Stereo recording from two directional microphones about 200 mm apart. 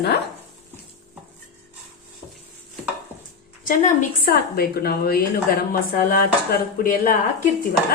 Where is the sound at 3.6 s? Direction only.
40° left (ahead or behind).